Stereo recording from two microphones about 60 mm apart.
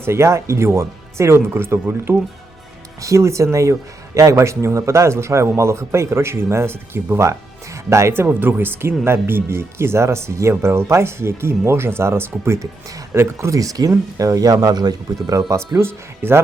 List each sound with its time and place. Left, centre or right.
0.0 s speech: right
3.0 s speech: right
7.9 s speech: right
13.6 s speech: right
14.2 s speech: right
15.8 s speech: right